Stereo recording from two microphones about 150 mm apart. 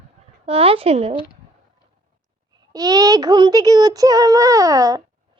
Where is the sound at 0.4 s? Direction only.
40° right (ahead or behind).